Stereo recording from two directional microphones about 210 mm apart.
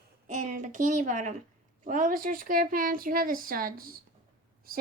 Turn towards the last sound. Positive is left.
turn(degrees=-45)  # may be behind; listen again after turning